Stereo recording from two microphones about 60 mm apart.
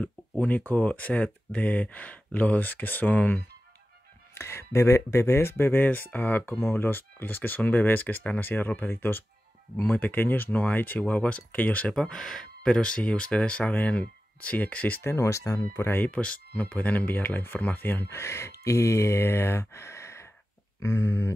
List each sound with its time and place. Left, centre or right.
0.0 s speech: left
4.4 s speech: left
5.9 s speech: left
11.9 s speech: centre; by 15.0 s left
15.0 s speech: left
15.7 s speech: left
16.1 s speech: centre
18.1 s speech: left
20.8 s speech: left